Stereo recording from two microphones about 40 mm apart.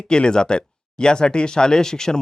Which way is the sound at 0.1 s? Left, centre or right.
Centre.